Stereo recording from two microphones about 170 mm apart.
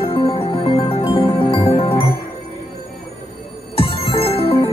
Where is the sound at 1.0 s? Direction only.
20° left (ahead or behind).